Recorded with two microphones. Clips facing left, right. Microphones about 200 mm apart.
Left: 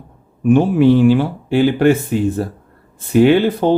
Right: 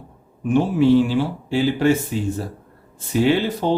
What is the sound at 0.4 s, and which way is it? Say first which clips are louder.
A man's voice: left 5 dB; 60° left (ahead or behind).